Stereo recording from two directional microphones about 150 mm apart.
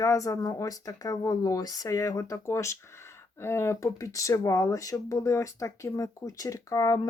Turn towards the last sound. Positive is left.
turn(degrees=25)  # may be behind; listen again after turning